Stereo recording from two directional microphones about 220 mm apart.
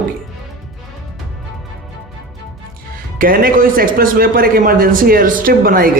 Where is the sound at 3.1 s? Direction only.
40° right (ahead or behind).